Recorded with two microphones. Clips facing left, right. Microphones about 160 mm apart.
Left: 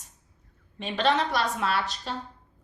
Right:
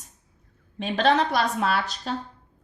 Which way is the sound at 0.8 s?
45° right (ahead or behind).